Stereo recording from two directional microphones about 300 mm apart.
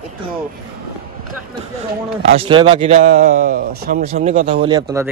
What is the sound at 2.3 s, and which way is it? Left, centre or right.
A man's voice, centre.